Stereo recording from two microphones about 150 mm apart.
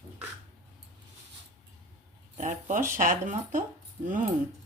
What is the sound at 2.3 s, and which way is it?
Speech, 60° right (ahead or behind).